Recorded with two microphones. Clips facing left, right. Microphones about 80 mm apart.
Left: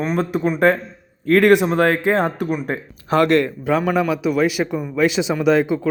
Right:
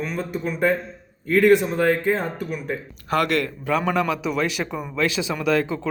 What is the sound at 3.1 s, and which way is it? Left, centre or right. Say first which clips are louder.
Speech: left 6 dB; left.